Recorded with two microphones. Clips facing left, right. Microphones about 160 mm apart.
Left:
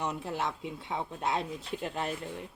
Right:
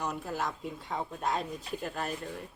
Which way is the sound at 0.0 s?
25° left (ahead or behind).